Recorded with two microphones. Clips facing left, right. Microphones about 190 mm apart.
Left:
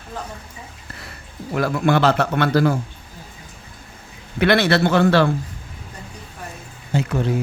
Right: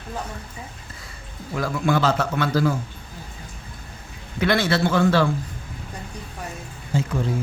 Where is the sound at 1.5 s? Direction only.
65° left (ahead or behind).